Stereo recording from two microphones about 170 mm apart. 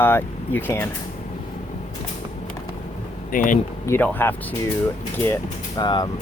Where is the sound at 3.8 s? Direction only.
10° left (ahead or behind).